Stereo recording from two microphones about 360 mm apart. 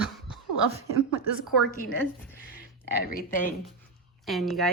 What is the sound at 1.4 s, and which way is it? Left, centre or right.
Speech, centre.